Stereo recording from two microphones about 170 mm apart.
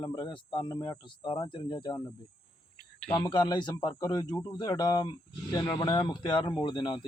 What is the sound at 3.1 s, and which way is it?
Speech, 30° left (ahead or behind).